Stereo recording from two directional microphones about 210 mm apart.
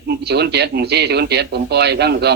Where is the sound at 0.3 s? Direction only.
50° right (ahead or behind).